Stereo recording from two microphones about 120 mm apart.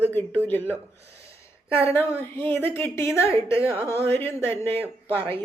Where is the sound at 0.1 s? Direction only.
15° left (ahead or behind).